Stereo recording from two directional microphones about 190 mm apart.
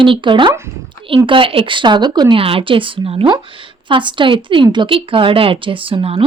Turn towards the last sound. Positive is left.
turn(degrees=-30)  # may be behind; listen again after turning